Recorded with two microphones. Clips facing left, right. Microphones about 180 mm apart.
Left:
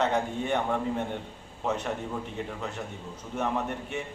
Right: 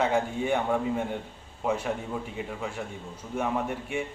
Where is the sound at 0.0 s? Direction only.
10° right (ahead or behind).